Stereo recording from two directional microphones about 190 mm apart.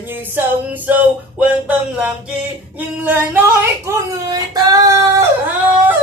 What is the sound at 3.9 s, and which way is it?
Child singing, 20° right (ahead or behind).